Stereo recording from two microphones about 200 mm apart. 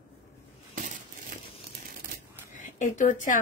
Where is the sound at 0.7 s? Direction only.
40° right (ahead or behind).